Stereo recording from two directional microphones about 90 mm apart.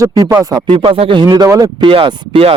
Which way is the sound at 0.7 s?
85° right.